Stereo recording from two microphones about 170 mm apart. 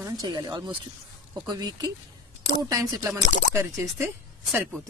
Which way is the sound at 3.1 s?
45° left (ahead or behind).